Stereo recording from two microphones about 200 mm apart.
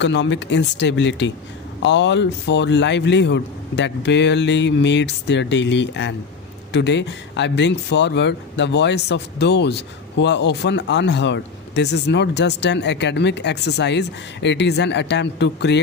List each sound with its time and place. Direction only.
0.0 s speech: 60° left (ahead or behind)